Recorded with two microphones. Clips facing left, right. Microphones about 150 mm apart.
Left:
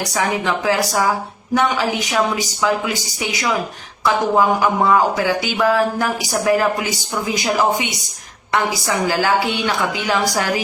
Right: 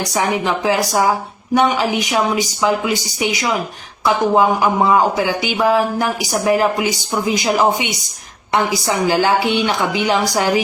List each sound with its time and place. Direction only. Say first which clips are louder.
0.4 s speech: right 1 dB; 25° right (ahead or behind)
4.0 s speech: right 2 dB; 20° right (ahead or behind)
9.0 s speech: right 3 dB; 25° right (ahead or behind)